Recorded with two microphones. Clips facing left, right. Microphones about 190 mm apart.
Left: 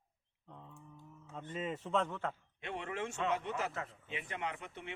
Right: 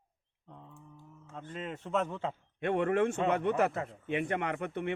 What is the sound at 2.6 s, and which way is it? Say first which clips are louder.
A man's voice: right 13 dB; 55° right (ahead or behind).